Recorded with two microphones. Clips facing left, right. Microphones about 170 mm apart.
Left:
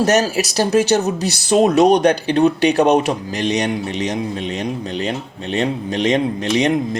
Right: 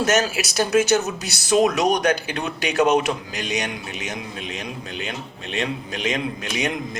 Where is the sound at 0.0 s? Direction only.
35° left (ahead or behind).